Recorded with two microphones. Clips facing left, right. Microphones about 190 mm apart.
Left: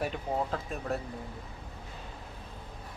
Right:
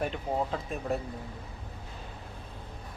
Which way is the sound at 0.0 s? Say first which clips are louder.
Right 1 dB; centre (ahead or behind).